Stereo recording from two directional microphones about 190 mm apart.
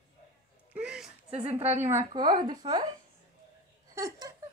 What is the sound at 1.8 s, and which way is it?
A woman's voice, 15° right (ahead or behind).